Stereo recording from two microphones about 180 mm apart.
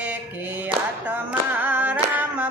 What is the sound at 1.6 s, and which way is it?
Music, 10° right (ahead or behind).